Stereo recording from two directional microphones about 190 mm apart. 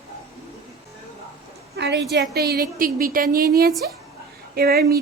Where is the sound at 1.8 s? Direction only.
65° right (ahead or behind).